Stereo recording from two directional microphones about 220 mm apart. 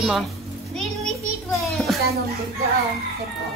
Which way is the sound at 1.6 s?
5° left (ahead or behind).